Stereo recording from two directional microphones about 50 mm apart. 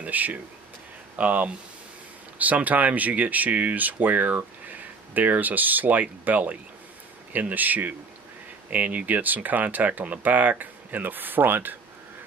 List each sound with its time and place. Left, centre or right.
0.0 s speech: right